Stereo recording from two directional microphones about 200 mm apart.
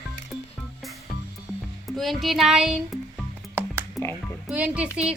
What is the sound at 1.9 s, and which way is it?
Speech, centre (ahead or behind).